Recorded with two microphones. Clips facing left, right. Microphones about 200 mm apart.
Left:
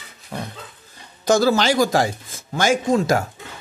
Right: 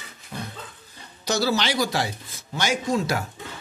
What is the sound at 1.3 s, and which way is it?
Speech, 45° left (ahead or behind).